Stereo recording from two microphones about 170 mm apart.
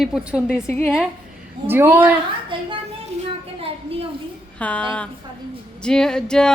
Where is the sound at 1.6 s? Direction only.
15° right (ahead or behind).